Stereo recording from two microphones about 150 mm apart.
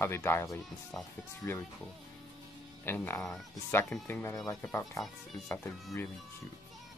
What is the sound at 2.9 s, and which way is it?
Speech, 15° left (ahead or behind).